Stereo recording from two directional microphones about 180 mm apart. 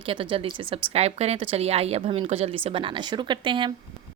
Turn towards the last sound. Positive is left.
turn(degrees=-25)  # may be behind; listen again after turning